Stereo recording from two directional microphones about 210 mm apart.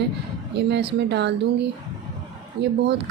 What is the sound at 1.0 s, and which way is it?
Speech, 55° right (ahead or behind).